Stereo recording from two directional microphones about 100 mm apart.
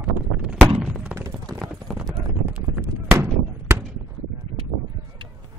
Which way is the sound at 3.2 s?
25° right (ahead or behind).